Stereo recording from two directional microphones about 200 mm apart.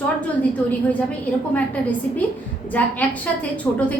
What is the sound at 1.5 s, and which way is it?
A woman's voice, 5° left (ahead or behind).